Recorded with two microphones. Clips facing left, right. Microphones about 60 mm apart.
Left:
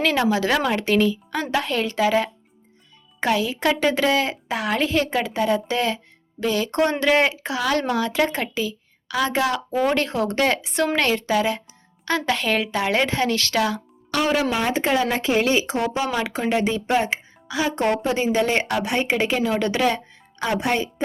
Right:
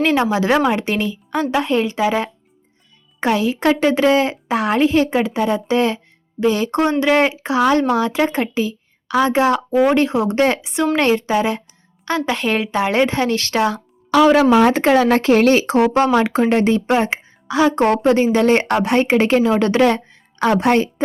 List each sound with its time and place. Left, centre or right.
0.0 s speech: right
14.6 s speech: right
16.1 s speech: right
20.4 s speech: right